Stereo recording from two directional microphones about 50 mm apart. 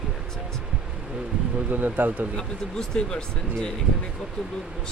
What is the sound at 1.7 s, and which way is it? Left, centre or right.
Speech, right.